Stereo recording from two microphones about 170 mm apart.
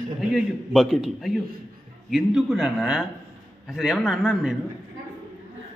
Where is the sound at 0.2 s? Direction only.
Centre (ahead or behind).